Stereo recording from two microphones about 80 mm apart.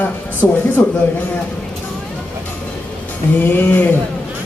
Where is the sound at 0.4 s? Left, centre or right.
Centre.